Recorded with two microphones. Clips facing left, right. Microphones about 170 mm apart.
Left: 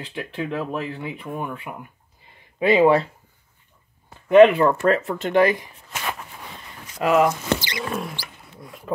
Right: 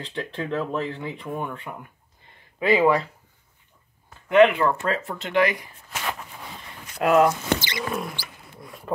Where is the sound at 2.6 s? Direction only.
25° left (ahead or behind).